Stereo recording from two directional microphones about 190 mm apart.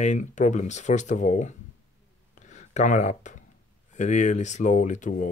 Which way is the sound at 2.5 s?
40° left (ahead or behind).